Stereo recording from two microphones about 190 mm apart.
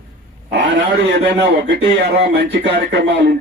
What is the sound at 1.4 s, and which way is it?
Speech, 65° right (ahead or behind).